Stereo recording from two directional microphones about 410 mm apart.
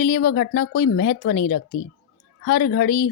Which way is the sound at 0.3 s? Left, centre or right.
Left.